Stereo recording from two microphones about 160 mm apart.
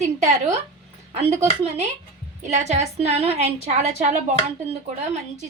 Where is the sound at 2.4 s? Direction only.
45° right (ahead or behind).